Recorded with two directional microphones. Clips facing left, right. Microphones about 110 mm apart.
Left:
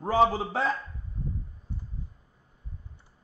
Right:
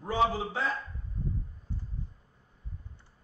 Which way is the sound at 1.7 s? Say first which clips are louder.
Left 1 dB; 15° left (ahead or behind).